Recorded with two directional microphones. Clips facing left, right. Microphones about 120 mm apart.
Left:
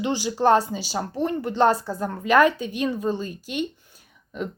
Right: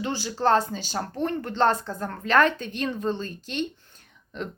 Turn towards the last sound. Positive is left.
turn(degrees=5)  # may be behind; listen again after turning